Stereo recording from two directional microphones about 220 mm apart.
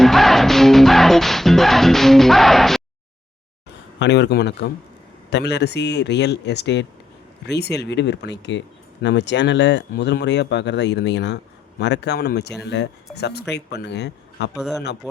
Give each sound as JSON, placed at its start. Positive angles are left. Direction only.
{"t": 0.0, "sound": "music", "side_deg": 0}
{"t": 4.0, "sound": "speech", "side_deg": 50}
{"t": 14.5, "sound": "a man's voice", "side_deg": 0}